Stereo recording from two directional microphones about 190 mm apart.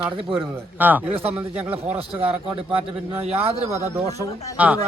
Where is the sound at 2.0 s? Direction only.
30° right (ahead or behind).